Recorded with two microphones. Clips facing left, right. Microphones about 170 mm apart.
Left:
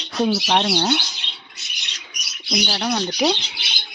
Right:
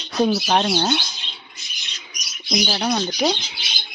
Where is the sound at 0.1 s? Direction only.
Centre (ahead or behind).